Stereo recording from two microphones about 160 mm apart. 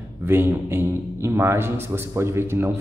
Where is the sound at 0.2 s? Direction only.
15° right (ahead or behind).